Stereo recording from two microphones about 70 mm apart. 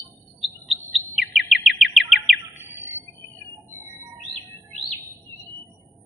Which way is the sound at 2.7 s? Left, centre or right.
Right.